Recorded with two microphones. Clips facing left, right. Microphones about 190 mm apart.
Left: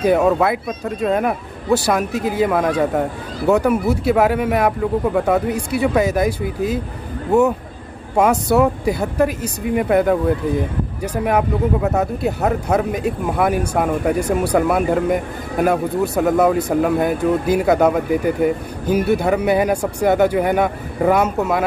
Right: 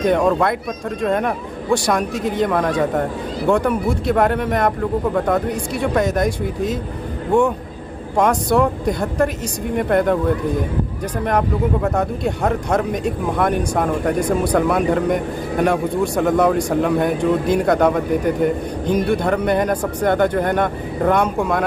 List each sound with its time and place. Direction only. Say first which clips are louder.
0.0 s a man's voice: left 1 dB; 5° left (ahead or behind)
8.2 s a man's voice: left 1 dB; 5° left (ahead or behind)